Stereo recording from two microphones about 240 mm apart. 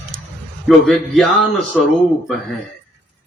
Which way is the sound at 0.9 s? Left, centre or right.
Centre.